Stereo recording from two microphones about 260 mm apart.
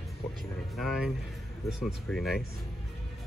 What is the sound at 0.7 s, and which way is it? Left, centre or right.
Speech, centre.